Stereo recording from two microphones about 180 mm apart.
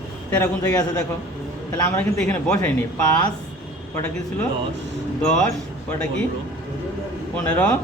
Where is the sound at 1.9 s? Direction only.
15° left (ahead or behind).